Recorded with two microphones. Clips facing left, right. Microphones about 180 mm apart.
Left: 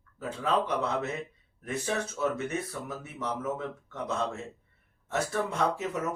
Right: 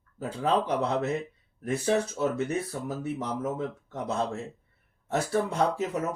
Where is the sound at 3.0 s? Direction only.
35° right (ahead or behind).